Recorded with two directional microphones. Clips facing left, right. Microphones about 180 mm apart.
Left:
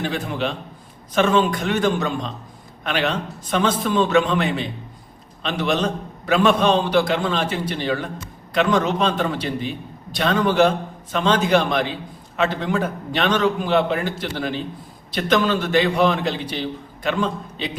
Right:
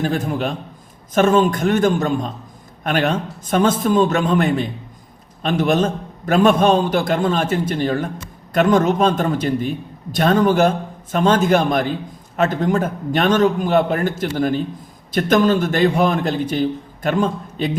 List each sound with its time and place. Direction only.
0.0 s a man's voice: 45° right (ahead or behind)